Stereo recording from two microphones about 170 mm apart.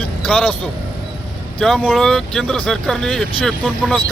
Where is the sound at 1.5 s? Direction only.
Centre (ahead or behind).